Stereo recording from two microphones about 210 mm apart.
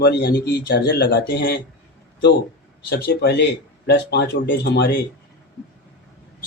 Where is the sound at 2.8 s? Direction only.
45° left (ahead or behind).